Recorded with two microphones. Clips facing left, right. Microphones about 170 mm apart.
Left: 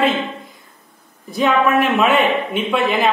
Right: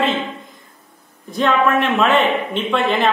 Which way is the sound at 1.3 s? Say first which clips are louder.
Left 1 dB; 5° left (ahead or behind).